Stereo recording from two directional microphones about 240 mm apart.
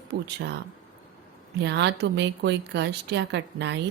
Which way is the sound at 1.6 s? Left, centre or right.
Right.